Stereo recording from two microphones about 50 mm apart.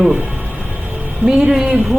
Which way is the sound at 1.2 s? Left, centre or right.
Centre.